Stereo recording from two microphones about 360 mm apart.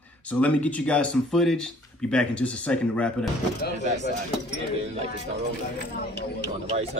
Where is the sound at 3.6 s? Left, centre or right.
Left.